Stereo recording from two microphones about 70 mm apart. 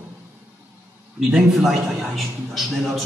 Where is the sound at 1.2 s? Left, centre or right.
Centre.